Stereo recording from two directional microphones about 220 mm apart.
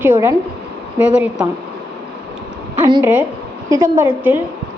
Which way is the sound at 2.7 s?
10° right (ahead or behind).